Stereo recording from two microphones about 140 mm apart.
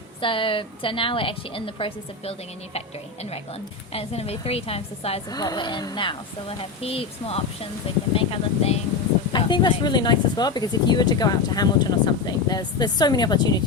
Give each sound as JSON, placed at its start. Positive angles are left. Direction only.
{"t": 0.2, "sound": "a woman's voice", "side_deg": 40}
{"t": 3.9, "sound": "a woman's voice", "side_deg": 45}
{"t": 5.3, "sound": "a woman's voice", "side_deg": 30}
{"t": 6.6, "sound": "a woman's voice", "side_deg": 45}
{"t": 9.3, "sound": "speech", "side_deg": 30}